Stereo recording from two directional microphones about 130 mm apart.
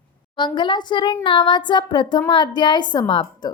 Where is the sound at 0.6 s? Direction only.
35° left (ahead or behind).